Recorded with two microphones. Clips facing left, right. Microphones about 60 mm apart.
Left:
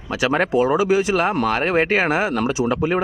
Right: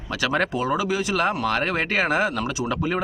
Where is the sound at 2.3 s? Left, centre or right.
Left.